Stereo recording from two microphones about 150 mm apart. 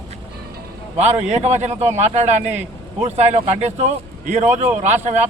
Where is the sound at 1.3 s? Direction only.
50° right (ahead or behind).